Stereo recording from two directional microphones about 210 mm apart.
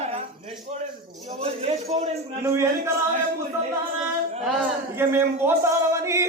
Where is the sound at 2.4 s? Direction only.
15° right (ahead or behind).